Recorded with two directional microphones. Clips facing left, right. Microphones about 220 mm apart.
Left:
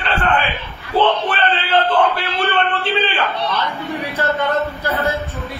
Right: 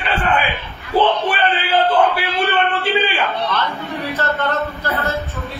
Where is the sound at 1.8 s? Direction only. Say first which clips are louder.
Right 4 dB; 10° right (ahead or behind).